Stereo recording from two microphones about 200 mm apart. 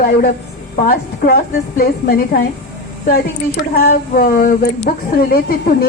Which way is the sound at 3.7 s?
45° left (ahead or behind).